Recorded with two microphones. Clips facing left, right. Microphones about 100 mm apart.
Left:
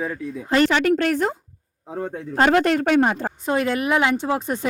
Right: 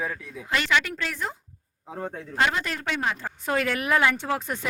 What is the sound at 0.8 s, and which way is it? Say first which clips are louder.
Speech: left 12 dB; 55° left (ahead or behind).